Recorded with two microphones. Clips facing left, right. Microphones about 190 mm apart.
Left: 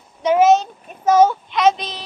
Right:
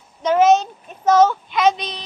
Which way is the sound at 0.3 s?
5° left (ahead or behind).